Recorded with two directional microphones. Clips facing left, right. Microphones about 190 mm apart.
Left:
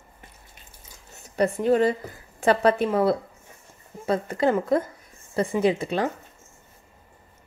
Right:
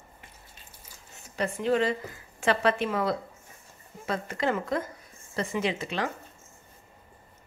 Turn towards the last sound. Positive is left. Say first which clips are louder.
# left 7 dB
turn(degrees=30)  # may be behind; listen again after turning